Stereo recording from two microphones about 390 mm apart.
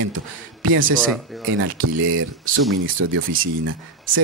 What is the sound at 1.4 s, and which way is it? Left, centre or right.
Speech, right.